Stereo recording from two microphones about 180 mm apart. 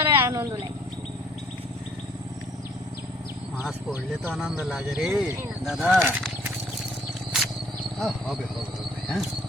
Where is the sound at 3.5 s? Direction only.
10° right (ahead or behind).